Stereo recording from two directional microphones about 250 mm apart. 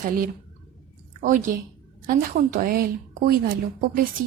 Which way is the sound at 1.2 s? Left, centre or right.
Right.